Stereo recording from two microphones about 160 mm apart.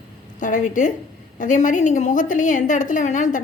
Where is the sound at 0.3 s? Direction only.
50° left (ahead or behind).